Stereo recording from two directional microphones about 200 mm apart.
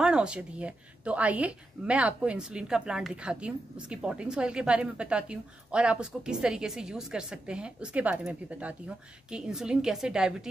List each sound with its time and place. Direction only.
0.0 s speech: 5° right (ahead or behind)